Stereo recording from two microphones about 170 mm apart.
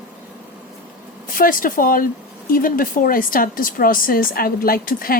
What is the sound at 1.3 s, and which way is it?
Speech, 55° left (ahead or behind).